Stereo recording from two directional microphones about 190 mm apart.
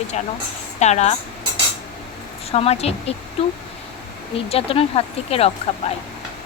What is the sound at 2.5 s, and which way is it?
Speech, 30° left (ahead or behind).